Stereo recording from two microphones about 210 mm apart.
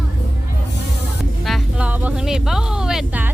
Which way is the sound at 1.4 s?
5° right (ahead or behind).